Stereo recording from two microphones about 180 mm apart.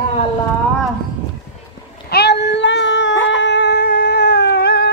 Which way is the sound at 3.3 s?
75° left (ahead or behind).